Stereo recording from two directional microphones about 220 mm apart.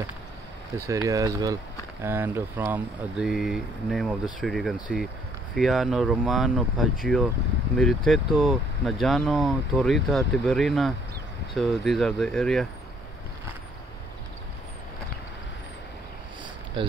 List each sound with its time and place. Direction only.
0.7 s speech: 15° right (ahead or behind); by 12.6 s centre (ahead or behind)
16.8 s speech: 20° right (ahead or behind)